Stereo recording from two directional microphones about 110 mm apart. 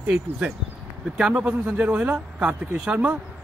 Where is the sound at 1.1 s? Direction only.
5° right (ahead or behind).